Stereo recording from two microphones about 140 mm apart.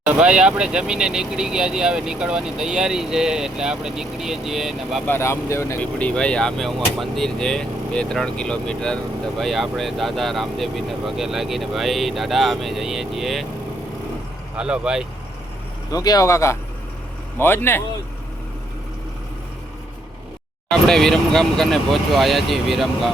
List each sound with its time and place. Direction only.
0.1 s speech: 5° right (ahead or behind)
5.0 s speech: 15° left (ahead or behind); by 13.4 s centre (ahead or behind)
14.5 s speech: 5° right (ahead or behind)
15.9 s speech: 25° left (ahead or behind)
20.7 s speech: 5° left (ahead or behind)